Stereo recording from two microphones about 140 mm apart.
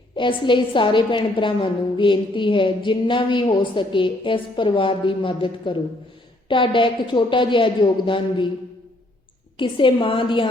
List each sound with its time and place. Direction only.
0.2 s a woman's voice: 35° left (ahead or behind)
9.6 s a woman's voice: 35° left (ahead or behind)